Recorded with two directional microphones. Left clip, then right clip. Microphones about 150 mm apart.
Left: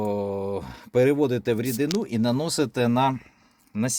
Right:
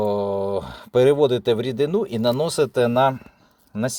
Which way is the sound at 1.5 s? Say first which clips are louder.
Right 5 dB; 30° right (ahead or behind).